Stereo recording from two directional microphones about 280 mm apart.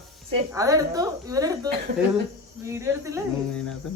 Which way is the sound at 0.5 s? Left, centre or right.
Centre.